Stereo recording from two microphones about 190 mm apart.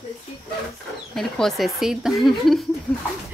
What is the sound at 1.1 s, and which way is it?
Speech, centre (ahead or behind).